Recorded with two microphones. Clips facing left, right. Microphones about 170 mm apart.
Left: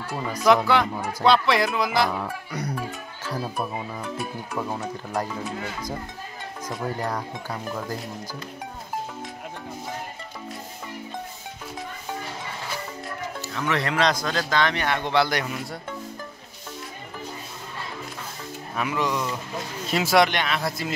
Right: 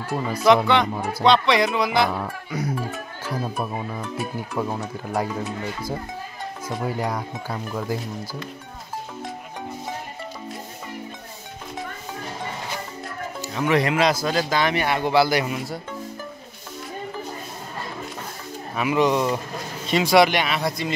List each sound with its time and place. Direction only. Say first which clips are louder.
0.1 s speech: right 4 dB; 10° right (ahead or behind)
0.7 s speech: right 2 dB; 5° left (ahead or behind)
13.4 s speech: right 6 dB; 15° right (ahead or behind)
18.9 s speech: right 8 dB; 25° right (ahead or behind)
19.9 s speech: right 3 dB; centre (ahead or behind)
20.2 s speech: right 3 dB; 10° right (ahead or behind)